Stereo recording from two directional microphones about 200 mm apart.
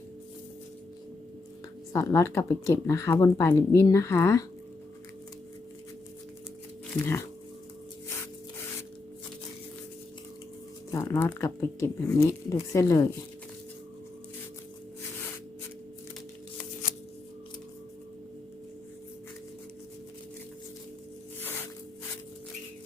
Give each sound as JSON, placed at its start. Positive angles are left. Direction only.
{"t": 1.9, "sound": "speech", "side_deg": 15}
{"t": 7.0, "sound": "speech", "side_deg": 10}
{"t": 10.9, "sound": "speech", "side_deg": 15}